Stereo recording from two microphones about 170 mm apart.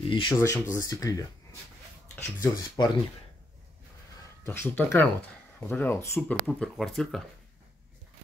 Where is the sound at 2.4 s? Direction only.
20° left (ahead or behind).